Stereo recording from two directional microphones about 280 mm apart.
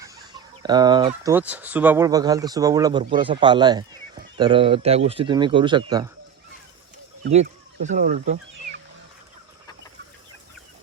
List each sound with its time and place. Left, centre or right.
0.0 s speech: centre
7.3 s speech: right